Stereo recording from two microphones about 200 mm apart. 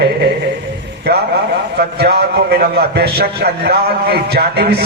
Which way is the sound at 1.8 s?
50° right (ahead or behind).